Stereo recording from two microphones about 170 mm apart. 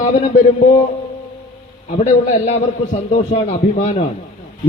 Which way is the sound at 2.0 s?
40° left (ahead or behind).